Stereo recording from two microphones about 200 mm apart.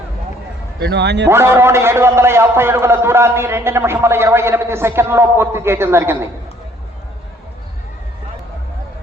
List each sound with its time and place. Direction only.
0.8 s speech: 60° right (ahead or behind)
1.3 s a man's voice: 10° right (ahead or behind)